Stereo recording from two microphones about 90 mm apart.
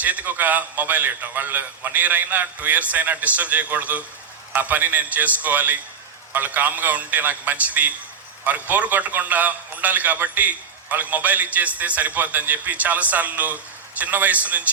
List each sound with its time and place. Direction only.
0.0 s a man's voice: 15° right (ahead or behind)